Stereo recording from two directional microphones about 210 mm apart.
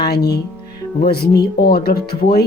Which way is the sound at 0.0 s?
50° left (ahead or behind).